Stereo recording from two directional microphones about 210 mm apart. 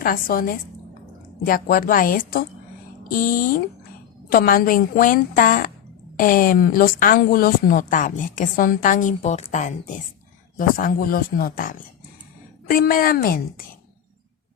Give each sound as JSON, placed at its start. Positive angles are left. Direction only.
{"t": 0.0, "sound": "a woman's voice", "side_deg": 45}